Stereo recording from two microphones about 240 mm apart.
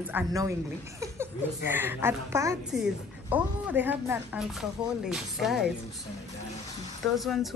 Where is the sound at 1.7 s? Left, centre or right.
Centre.